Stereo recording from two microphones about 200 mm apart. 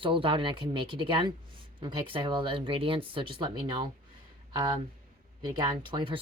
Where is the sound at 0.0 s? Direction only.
25° right (ahead or behind).